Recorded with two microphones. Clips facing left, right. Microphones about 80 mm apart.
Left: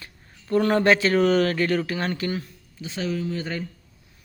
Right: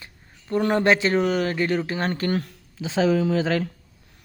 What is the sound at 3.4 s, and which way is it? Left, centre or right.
Speech, right.